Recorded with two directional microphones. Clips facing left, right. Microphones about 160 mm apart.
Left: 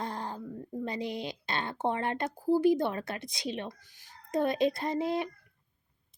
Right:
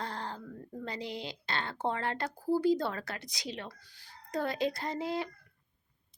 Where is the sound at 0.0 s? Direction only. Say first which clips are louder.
Left 3 dB; 20° left (ahead or behind).